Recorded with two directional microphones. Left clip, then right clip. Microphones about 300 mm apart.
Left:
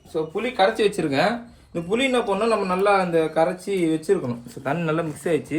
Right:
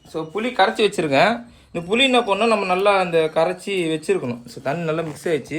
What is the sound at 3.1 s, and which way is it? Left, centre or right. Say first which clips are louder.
Speech: right 2 dB; centre.